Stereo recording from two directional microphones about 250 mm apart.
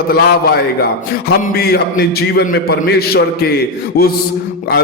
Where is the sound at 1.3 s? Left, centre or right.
Left.